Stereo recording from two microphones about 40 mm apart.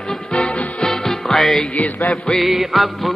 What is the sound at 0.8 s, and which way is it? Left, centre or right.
Music, centre.